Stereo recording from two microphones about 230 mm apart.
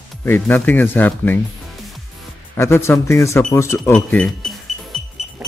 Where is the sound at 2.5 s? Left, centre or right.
Centre.